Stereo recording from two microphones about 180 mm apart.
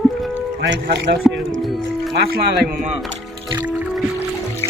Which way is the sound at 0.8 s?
70° right (ahead or behind).